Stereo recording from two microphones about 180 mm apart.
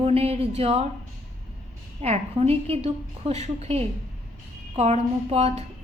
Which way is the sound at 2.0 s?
35° right (ahead or behind).